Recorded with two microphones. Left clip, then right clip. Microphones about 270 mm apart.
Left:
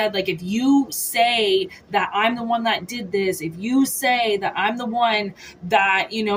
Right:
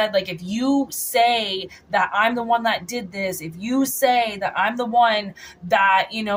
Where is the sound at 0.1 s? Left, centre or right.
Centre.